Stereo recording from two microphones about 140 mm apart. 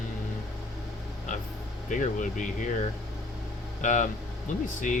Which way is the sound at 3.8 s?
65° left (ahead or behind).